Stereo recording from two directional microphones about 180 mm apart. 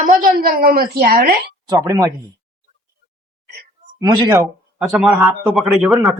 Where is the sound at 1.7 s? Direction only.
20° right (ahead or behind).